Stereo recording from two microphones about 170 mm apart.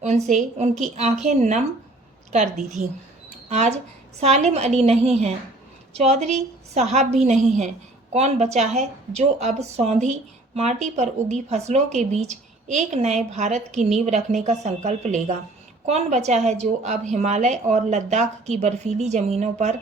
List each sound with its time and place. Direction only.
0.3 s a woman's voice: 45° right (ahead or behind)